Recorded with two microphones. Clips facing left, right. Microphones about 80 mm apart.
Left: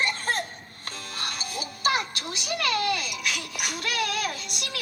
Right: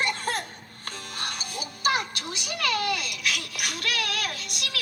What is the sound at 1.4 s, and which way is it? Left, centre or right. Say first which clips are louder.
Music: left 1 dB; centre.